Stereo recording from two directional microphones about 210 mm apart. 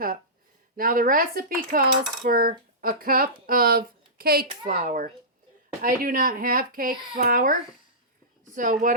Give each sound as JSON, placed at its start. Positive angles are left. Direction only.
{"t": 0.8, "sound": "cutlery", "side_deg": -40}
{"t": 8.5, "sound": "speech", "side_deg": -40}